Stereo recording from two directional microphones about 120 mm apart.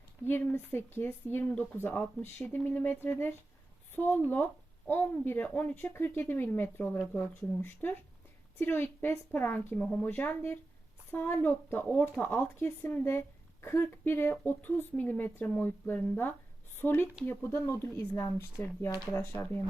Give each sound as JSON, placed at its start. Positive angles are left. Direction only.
{"t": 0.3, "sound": "speech", "side_deg": 20}